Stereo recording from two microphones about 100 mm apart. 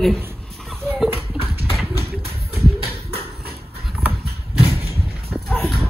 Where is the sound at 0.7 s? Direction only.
20° right (ahead or behind).